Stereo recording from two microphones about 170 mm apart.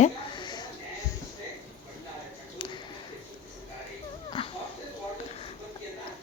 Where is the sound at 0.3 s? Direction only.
25° left (ahead or behind).